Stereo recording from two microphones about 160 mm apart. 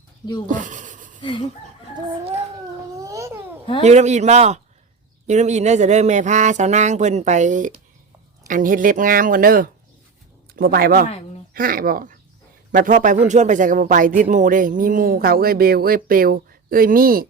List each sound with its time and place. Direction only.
0.4 s a sound: 55° right (ahead or behind)
3.0 s babbling: 20° right (ahead or behind)
3.8 s speech: 45° right (ahead or behind); by 17.2 s 65° right (ahead or behind)